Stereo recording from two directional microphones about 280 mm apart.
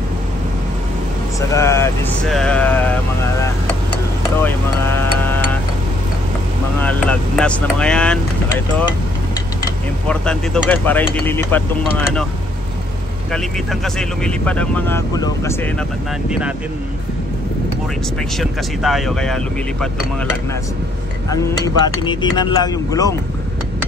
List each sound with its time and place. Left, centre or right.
1.5 s speech: centre
4.4 s speech: centre
6.8 s speech: centre
10.0 s speech: centre
13.3 s speech: centre
16.3 s speech: centre
18.4 s speech: centre
21.8 s speech: centre